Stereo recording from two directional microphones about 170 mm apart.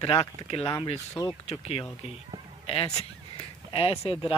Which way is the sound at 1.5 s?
35° left (ahead or behind).